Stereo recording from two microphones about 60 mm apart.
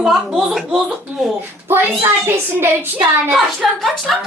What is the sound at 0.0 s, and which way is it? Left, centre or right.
Speech, centre.